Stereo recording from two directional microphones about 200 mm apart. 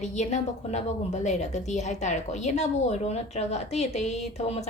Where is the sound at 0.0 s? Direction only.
35° left (ahead or behind).